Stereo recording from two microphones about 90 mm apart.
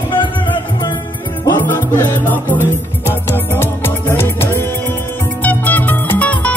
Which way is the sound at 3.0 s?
25° left (ahead or behind).